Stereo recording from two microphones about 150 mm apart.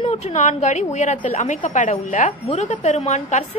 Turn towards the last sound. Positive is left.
turn(degrees=50)  # may be behind; listen again after turning